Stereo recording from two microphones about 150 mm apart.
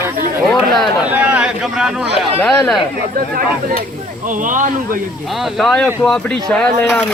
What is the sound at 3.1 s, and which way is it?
Speech, 75° right (ahead or behind).